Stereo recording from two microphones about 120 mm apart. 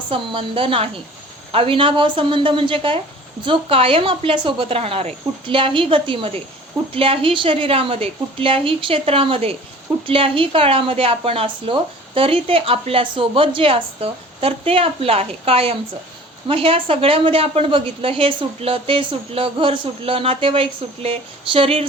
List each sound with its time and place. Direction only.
0.1 s a woman's voice: 45° right (ahead or behind)